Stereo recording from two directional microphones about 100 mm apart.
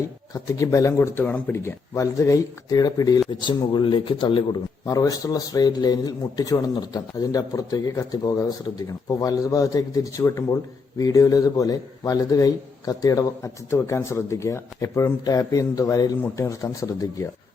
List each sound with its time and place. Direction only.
0.3 s a man's voice: 30° left (ahead or behind); by 4.4 s 60° left (ahead or behind)
4.9 s a man's voice: 35° left (ahead or behind)
16.2 s speech: 25° left (ahead or behind)
16.6 s a man's voice: 35° left (ahead or behind)